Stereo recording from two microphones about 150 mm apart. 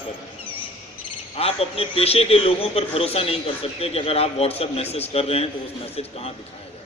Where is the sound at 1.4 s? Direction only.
40° left (ahead or behind).